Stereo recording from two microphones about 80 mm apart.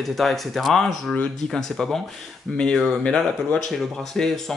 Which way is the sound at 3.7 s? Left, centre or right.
Centre.